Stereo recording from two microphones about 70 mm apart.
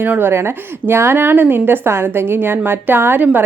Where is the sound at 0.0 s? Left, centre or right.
Right.